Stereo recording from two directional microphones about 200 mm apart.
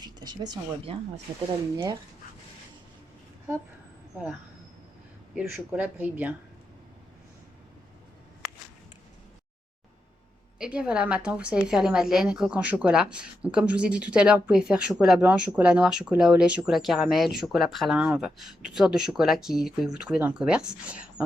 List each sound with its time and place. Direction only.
0.0 s speech: 20° right (ahead or behind)
5.3 s speech: 5° right (ahead or behind)
10.6 s speech: 5° right (ahead or behind)